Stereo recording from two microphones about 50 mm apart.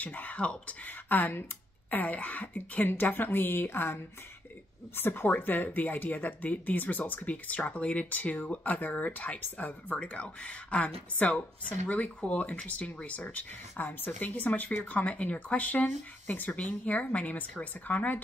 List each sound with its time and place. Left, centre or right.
0.0 s speech: left
10.0 s speech: left